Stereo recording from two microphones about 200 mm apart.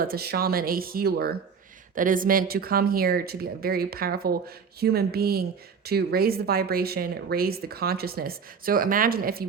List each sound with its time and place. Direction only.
0.0 s speech: 50° right (ahead or behind)